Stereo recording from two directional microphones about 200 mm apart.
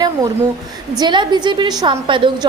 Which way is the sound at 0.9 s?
20° right (ahead or behind).